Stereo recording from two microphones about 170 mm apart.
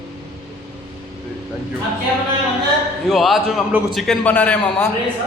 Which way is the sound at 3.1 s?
Centre (ahead or behind).